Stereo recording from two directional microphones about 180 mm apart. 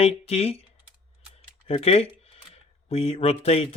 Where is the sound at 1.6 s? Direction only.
35° left (ahead or behind).